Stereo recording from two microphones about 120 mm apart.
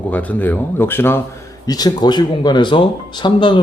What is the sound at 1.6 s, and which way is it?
Speech, 35° left (ahead or behind).